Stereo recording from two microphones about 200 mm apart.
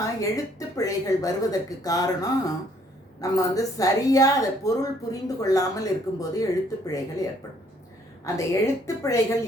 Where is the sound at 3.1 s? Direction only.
15° left (ahead or behind).